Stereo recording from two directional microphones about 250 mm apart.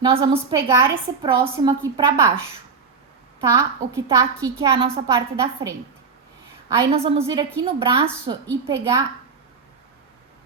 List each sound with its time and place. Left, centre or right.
0.5 s a woman's voice: centre
3.4 s a woman's voice: centre